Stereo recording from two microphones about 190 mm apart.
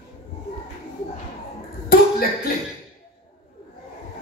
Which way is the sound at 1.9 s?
50° left (ahead or behind).